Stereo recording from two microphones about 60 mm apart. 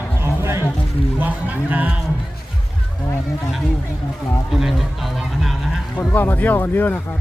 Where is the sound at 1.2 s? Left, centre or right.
Right.